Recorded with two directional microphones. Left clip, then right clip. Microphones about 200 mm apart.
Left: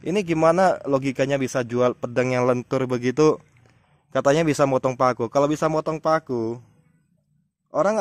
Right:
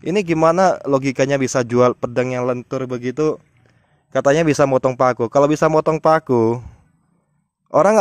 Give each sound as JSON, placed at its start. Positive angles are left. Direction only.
{"t": 0.0, "sound": "a man's voice", "side_deg": -15}
{"t": 2.2, "sound": "speech", "side_deg": -5}
{"t": 4.1, "sound": "a man's voice", "side_deg": -10}
{"t": 7.7, "sound": "speech", "side_deg": -35}